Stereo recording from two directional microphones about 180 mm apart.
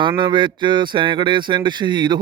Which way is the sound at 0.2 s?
25° right (ahead or behind).